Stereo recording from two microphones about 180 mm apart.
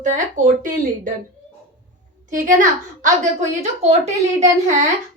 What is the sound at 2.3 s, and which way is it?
A woman's voice, 45° right (ahead or behind).